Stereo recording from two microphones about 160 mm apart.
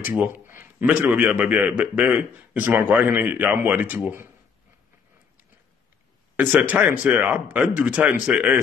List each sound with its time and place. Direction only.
0.1 s a man's voice: 10° right (ahead or behind)
6.3 s a man's voice: 10° right (ahead or behind)